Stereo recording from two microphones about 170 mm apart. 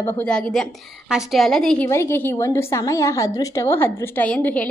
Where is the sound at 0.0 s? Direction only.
5° left (ahead or behind).